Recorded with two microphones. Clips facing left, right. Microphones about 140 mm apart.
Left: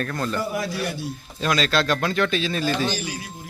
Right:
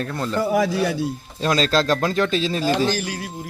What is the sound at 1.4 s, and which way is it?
Speech, 30° right (ahead or behind).